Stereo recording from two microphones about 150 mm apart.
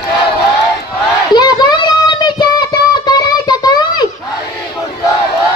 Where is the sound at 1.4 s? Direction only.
30° left (ahead or behind).